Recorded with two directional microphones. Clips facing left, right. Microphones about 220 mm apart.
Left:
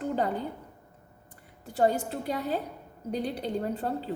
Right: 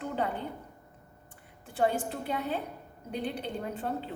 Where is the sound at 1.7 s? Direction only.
40° left (ahead or behind).